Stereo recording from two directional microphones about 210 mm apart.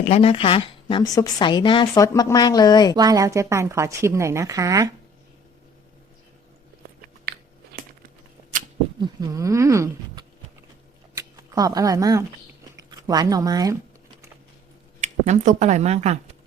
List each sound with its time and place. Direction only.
0.1 s a woman's voice: 30° left (ahead or behind)
2.9 s a woman's voice: 20° right (ahead or behind)
9.0 s speech: 20° right (ahead or behind)
15.0 s speech: 35° right (ahead or behind)